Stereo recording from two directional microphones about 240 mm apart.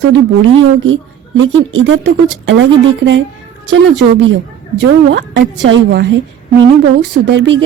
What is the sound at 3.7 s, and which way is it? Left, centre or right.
Speech, right.